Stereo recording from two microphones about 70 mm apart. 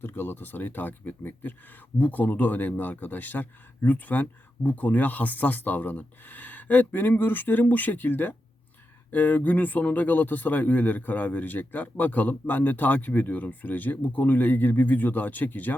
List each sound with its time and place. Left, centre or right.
0.0 s speech: left